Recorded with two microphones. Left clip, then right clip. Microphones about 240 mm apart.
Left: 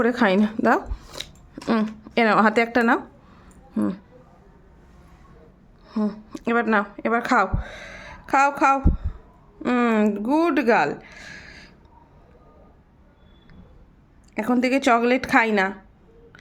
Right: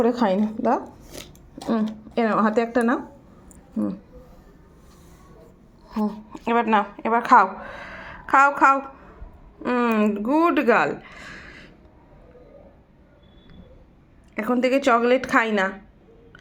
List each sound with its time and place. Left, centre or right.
0.0 s speech: centre
2.1 s speech: left
6.0 s speech: left
14.3 s a woman's voice: left